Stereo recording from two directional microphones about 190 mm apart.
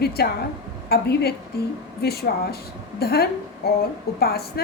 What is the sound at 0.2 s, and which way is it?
A woman's voice, 55° left (ahead or behind).